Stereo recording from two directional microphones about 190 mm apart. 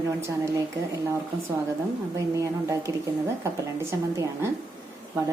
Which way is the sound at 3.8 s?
15° right (ahead or behind).